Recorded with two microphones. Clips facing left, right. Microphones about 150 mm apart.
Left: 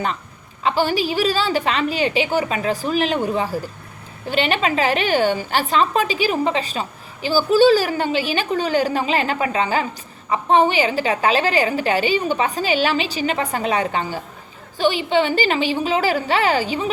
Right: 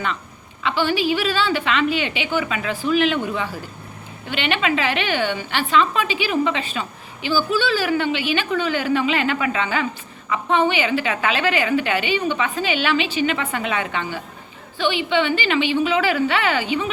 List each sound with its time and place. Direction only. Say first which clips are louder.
0.6 s a woman's voice: left 1 dB; 40° left (ahead or behind)